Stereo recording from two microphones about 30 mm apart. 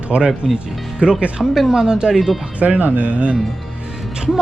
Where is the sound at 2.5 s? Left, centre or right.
Right.